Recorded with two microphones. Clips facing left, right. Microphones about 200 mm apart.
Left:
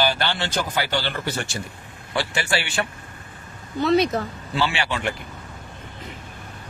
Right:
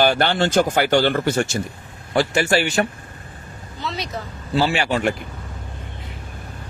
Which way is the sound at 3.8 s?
55° left (ahead or behind).